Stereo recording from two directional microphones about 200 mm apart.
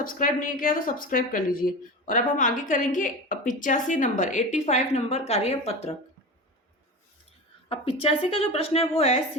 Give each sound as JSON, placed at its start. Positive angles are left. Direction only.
{"t": 0.0, "sound": "a woman's voice", "side_deg": 45}
{"t": 7.7, "sound": "a woman's voice", "side_deg": 30}